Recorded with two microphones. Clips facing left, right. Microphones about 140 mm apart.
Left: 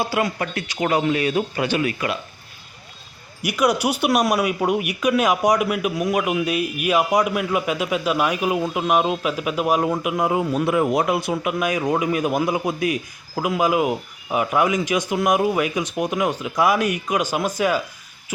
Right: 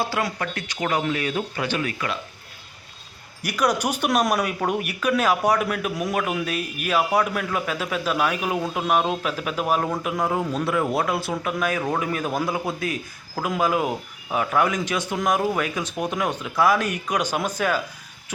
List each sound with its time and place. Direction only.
0.0 s speech: 10° left (ahead or behind)
3.4 s speech: 10° left (ahead or behind)